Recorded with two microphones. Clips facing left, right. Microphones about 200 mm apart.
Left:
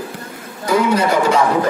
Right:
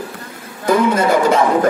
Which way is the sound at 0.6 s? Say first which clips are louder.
Right 1 dB; 50° right (ahead or behind).